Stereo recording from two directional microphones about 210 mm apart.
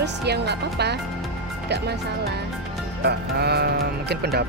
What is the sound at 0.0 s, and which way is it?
Speech, 50° right (ahead or behind).